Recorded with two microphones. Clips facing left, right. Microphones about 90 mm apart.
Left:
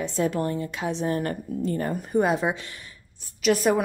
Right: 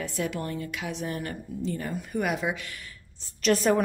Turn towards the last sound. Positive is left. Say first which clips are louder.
# left 1 dB
turn(degrees=5)  # may be behind; listen again after turning